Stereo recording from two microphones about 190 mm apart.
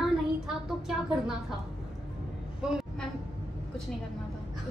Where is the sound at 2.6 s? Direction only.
5° right (ahead or behind).